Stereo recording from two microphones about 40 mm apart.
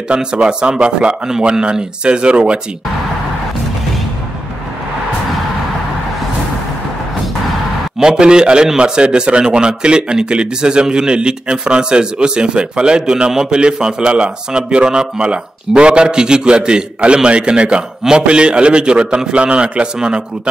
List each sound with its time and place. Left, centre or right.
0.1 s a man's voice: right
8.0 s a man's voice: centre